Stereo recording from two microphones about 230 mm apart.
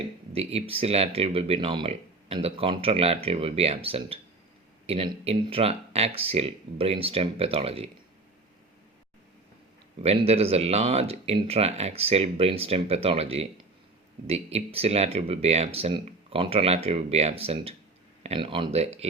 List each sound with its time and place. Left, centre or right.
0.3 s speech: right
10.0 s speech: right